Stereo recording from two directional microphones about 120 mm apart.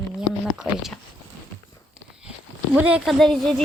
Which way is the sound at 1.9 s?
5° right (ahead or behind).